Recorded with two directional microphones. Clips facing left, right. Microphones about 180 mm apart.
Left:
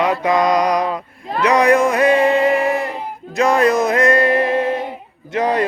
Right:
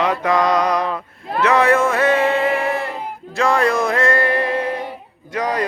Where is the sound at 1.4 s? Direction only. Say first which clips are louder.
Left 2 dB; 15° left (ahead or behind).